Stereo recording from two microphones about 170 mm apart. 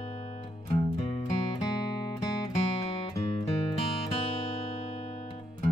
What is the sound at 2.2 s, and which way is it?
Music, 35° left (ahead or behind).